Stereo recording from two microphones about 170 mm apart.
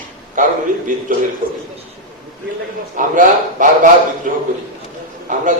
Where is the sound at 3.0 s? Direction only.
50° right (ahead or behind).